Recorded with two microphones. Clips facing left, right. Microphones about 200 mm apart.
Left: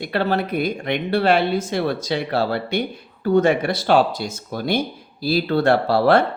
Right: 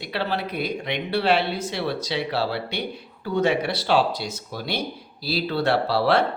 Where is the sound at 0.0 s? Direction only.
50° left (ahead or behind).